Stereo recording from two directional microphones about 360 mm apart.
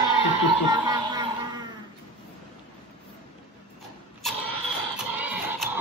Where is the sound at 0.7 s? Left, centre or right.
Centre.